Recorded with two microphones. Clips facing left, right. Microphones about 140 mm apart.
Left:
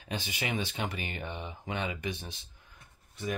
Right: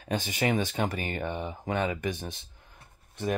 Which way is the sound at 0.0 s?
45° right (ahead or behind).